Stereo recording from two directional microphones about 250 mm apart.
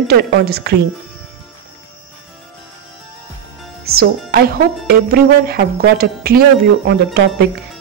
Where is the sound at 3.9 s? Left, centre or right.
Right.